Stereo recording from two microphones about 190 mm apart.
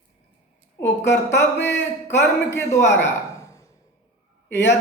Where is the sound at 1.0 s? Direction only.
65° left (ahead or behind).